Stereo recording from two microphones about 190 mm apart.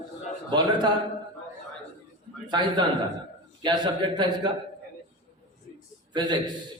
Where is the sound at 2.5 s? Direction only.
25° right (ahead or behind).